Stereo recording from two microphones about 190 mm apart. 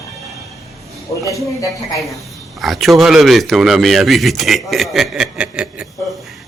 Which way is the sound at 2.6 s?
Centre (ahead or behind).